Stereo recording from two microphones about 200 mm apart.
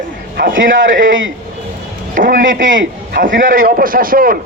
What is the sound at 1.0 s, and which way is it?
Speech, 75° right (ahead or behind).